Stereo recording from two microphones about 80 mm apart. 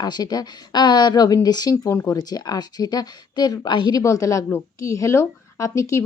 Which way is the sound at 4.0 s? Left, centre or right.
Left.